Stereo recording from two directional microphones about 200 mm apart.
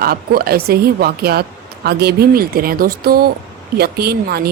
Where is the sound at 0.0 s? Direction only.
50° right (ahead or behind).